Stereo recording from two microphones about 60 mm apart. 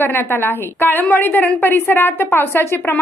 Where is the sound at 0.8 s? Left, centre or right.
Left.